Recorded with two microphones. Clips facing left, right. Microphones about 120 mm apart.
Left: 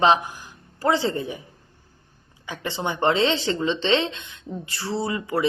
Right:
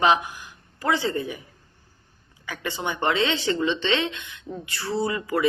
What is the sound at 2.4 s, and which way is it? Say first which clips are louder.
Music: left 1 dB; 25° left (ahead or behind).